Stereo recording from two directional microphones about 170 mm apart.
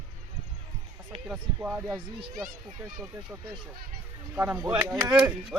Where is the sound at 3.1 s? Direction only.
10° right (ahead or behind).